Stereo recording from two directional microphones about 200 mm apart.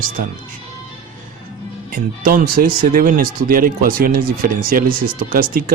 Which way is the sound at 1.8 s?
40° right (ahead or behind).